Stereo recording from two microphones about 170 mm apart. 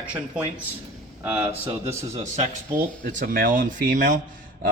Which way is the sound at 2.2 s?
45° right (ahead or behind).